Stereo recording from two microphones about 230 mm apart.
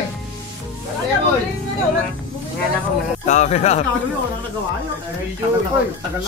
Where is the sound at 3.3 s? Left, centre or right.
Left.